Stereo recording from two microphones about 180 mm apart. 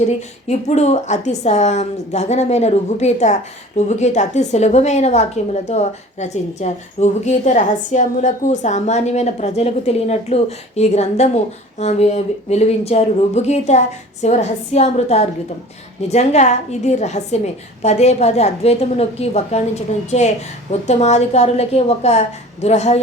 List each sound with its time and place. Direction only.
0.2 s a woman's voice: 40° left (ahead or behind)